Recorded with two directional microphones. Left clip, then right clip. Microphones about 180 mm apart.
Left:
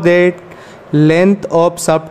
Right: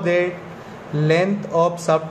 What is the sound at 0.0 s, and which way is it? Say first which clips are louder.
A man's voice: left 9 dB; 60° left (ahead or behind).